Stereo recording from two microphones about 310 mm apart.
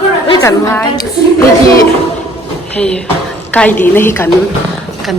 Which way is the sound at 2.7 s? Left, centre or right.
Centre.